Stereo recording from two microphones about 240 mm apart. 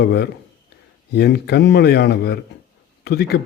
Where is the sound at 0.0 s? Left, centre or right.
Left.